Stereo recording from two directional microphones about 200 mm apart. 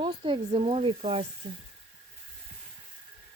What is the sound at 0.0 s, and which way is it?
Speech, 25° right (ahead or behind).